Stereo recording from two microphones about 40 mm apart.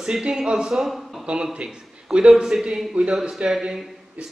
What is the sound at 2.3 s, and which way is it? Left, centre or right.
A man's voice, centre.